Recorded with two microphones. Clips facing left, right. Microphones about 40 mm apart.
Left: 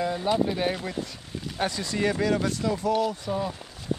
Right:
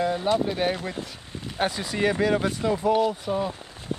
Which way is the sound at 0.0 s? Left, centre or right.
Centre.